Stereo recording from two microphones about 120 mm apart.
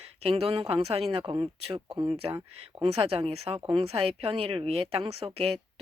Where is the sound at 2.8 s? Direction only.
50° right (ahead or behind).